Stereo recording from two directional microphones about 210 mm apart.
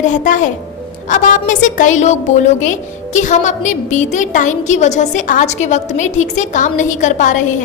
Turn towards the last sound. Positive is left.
turn(degrees=35)  # may be behind; listen again after turning